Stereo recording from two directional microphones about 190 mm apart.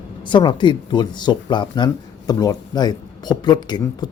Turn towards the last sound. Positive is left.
turn(degrees=20)  # may be behind; listen again after turning